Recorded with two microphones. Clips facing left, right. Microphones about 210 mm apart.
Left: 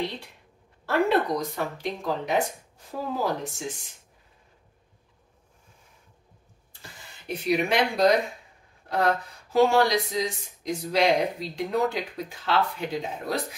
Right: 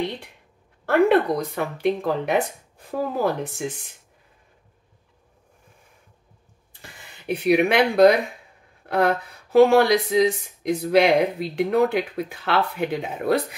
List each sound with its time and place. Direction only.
0.8 s speech: 55° right (ahead or behind)
7.2 s speech: 60° right (ahead or behind)